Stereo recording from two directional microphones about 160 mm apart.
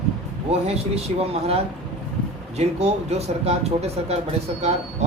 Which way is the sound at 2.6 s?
45° right (ahead or behind).